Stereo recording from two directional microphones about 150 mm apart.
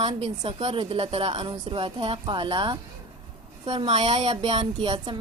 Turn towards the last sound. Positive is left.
turn(degrees=-30)  # may be behind; listen again after turning